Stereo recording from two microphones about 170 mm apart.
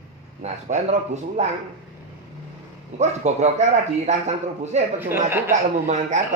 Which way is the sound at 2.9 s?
40° right (ahead or behind).